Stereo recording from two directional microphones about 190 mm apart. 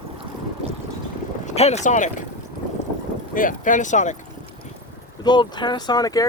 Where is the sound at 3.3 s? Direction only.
45° left (ahead or behind).